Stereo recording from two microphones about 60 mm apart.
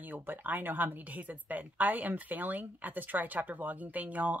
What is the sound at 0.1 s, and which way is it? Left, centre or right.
A woman's voice, right.